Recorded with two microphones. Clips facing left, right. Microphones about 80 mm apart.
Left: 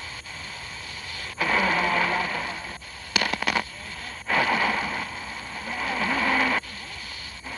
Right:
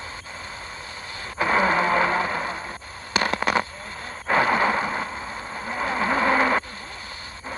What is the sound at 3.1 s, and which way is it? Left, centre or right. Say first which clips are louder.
Fireworks: right 4 dB; right.